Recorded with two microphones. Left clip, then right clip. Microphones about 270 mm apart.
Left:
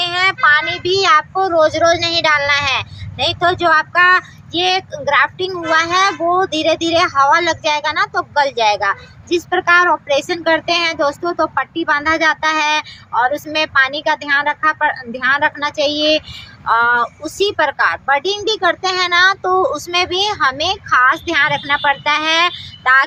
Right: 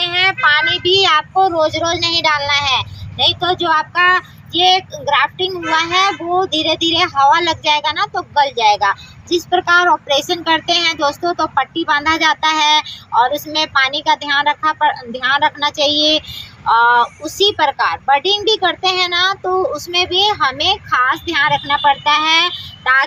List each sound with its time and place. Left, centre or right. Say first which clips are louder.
0.0 s a child's voice: even; centre